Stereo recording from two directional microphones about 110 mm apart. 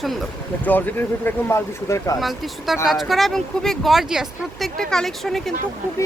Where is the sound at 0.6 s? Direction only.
15° left (ahead or behind).